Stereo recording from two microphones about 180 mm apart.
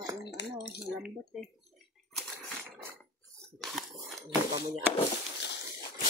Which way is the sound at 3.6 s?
Centre (ahead or behind).